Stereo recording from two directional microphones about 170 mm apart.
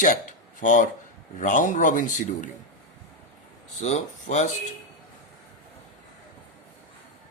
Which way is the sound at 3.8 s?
45° left (ahead or behind).